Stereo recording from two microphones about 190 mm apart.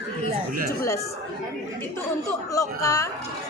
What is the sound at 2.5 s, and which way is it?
Speech, 15° left (ahead or behind).